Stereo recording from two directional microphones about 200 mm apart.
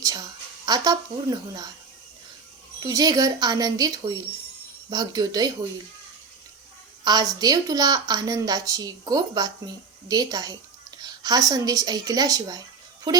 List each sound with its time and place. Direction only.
0.0 s a sound: 20° right (ahead or behind)
2.8 s a woman's voice: 20° right (ahead or behind)
7.0 s a woman's voice: 20° right (ahead or behind)